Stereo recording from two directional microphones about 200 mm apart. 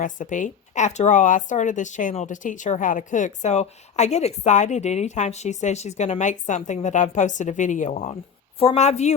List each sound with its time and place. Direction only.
0.0 s speech: 40° left (ahead or behind)